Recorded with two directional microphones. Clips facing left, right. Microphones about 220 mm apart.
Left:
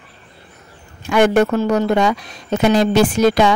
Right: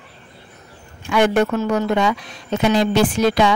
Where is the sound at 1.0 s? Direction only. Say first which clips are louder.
Left 3 dB; 45° left (ahead or behind).